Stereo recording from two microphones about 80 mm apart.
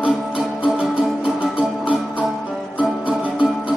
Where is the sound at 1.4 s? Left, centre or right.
Centre.